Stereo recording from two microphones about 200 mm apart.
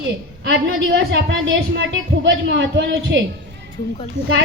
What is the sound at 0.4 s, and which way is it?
A woman's voice, 65° right (ahead or behind).